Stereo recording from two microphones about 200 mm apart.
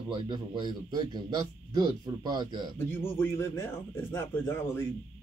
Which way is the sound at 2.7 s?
10° left (ahead or behind).